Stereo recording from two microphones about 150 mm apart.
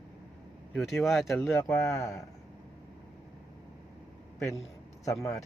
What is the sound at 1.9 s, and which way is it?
Speech, 20° left (ahead or behind).